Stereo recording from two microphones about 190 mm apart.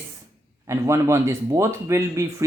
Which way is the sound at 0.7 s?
15° right (ahead or behind).